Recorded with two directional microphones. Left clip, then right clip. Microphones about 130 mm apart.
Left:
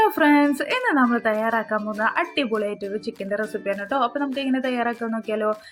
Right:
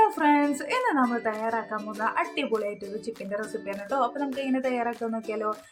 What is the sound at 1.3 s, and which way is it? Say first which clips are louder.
Speech: left 7 dB; 40° left (ahead or behind).